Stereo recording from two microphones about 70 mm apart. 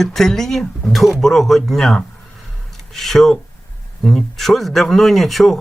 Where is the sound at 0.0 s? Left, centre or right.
Centre.